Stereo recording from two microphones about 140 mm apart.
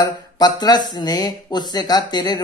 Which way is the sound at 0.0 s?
30° left (ahead or behind).